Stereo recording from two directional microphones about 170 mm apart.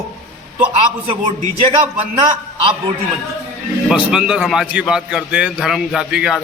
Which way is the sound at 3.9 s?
5° right (ahead or behind).